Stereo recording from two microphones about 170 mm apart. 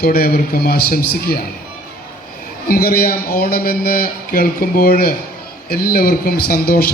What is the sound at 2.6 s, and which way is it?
A man's voice, 60° left (ahead or behind).